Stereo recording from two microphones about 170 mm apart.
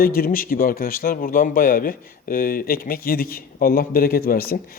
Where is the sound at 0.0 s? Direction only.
60° left (ahead or behind).